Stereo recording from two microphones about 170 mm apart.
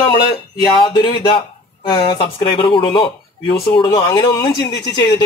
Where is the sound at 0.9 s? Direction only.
30° left (ahead or behind).